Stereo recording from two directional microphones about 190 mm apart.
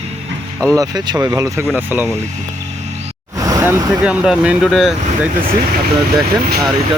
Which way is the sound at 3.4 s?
15° right (ahead or behind).